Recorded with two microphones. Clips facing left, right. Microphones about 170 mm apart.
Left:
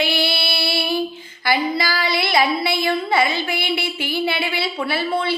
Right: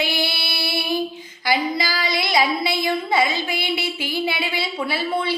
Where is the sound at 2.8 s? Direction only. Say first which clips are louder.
Left 1 dB; 20° right (ahead or behind).